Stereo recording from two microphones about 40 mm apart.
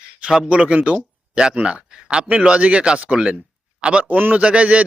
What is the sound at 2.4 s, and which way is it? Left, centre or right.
A man's voice, right.